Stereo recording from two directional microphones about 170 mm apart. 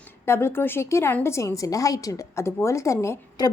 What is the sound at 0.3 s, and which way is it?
A woman's voice, 15° left (ahead or behind).